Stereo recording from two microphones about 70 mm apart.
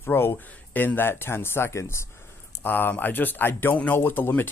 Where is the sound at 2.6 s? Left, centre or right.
Left.